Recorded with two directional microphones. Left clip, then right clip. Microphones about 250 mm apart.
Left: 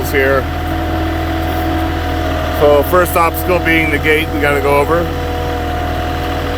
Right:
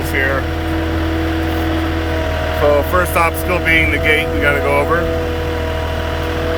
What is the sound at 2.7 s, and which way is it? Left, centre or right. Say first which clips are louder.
Speech: left 4 dB; left.